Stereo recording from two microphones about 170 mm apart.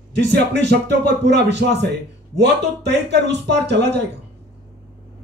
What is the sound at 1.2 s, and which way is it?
Speech, 90° right.